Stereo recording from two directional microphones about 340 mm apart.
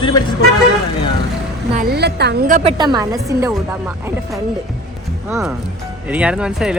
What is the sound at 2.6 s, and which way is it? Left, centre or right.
Speech, centre.